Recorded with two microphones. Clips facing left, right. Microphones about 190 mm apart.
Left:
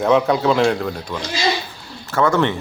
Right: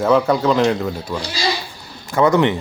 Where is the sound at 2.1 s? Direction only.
15° right (ahead or behind).